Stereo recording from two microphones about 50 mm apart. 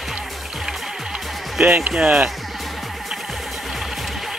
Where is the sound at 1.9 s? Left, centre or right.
Centre.